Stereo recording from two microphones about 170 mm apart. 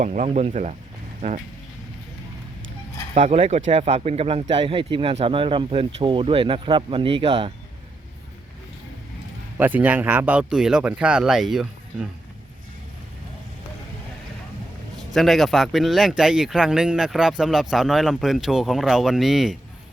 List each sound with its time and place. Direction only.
0.0 s speech: 45° right (ahead or behind)
3.2 s speech: 40° right (ahead or behind)
9.6 s speech: 10° right (ahead or behind)
15.1 s speech: centre (ahead or behind)